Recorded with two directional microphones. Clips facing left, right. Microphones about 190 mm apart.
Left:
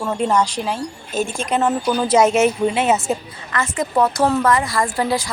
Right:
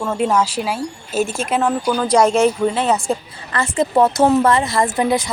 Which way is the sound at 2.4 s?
15° left (ahead or behind).